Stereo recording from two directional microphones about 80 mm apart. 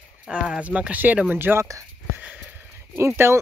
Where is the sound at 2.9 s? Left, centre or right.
Right.